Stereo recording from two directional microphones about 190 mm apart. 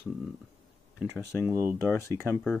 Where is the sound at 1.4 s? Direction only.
15° right (ahead or behind).